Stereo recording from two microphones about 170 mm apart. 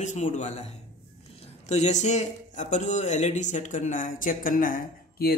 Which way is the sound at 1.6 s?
40° left (ahead or behind).